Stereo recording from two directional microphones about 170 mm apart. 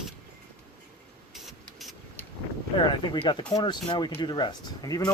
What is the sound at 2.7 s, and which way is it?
Speech, 25° left (ahead or behind).